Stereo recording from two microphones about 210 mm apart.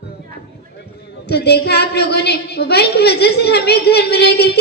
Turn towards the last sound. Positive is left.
turn(degrees=50)  # may be behind; listen again after turning